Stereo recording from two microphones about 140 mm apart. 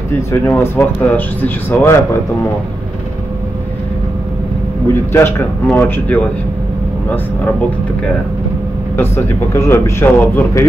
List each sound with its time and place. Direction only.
0.3 s speech: 15° left (ahead or behind)
5.1 s speech: 15° left (ahead or behind)
8.9 s speech: 20° left (ahead or behind)